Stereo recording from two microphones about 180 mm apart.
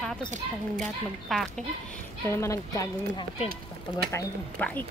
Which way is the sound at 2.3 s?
15° left (ahead or behind).